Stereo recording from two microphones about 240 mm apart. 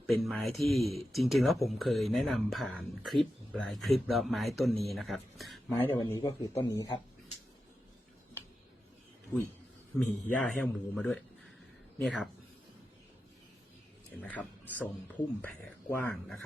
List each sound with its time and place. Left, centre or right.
0.0 s speech: centre
5.8 s a man's voice: centre
10.0 s speech: centre
14.2 s a man's voice: centre